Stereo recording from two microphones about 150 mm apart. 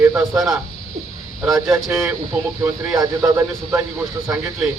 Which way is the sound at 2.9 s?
20° right (ahead or behind).